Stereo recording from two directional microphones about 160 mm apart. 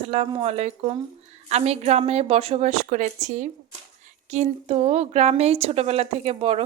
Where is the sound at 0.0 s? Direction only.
40° right (ahead or behind).